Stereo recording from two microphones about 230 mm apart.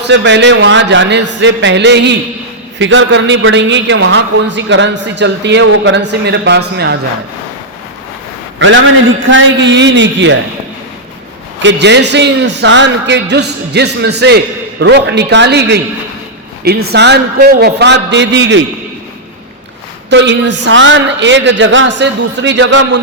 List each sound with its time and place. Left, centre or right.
0.0 s a man's voice: right
8.5 s a man's voice: right
11.6 s a man's voice: right
20.1 s a man's voice: right